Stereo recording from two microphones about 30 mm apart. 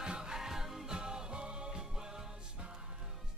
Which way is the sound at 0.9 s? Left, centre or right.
Right.